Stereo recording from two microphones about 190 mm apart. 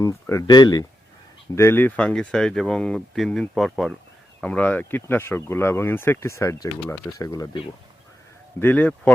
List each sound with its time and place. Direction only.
0.0 s speech: 15° left (ahead or behind)
8.6 s speech: 10° left (ahead or behind)